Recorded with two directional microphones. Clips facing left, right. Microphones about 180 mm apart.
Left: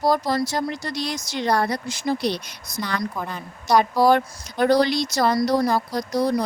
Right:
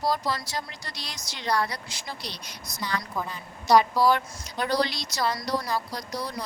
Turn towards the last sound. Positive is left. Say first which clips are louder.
# left 11 dB
turn(degrees=50)  # may be behind; listen again after turning